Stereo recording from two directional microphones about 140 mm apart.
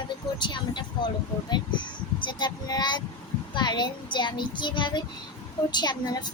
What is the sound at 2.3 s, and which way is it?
A child's voice, 30° left (ahead or behind).